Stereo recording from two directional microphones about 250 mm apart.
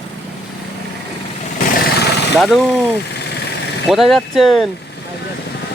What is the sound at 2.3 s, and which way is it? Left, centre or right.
Speech, centre.